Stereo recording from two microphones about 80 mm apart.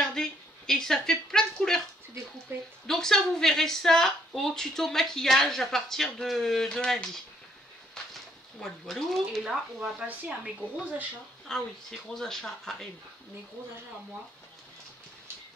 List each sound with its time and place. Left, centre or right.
0.0 s a sound: centre
2.5 s a woman's voice: right
2.9 s a woman's voice: centre
7.9 s a sound: centre
9.4 s speech: centre
11.5 s speech: centre